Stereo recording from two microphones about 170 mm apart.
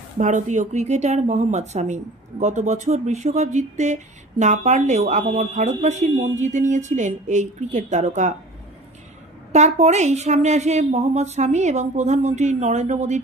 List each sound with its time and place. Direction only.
0.2 s speech: 45° right (ahead or behind)
9.5 s speech: 40° right (ahead or behind)